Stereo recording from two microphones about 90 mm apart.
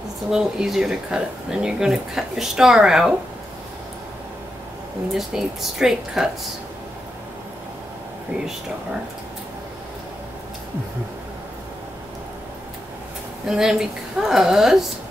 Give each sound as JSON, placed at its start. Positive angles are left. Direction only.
{"t": 0.3, "sound": "speech", "side_deg": -5}
{"t": 5.1, "sound": "a woman's voice", "side_deg": -5}
{"t": 13.5, "sound": "a woman's voice", "side_deg": -5}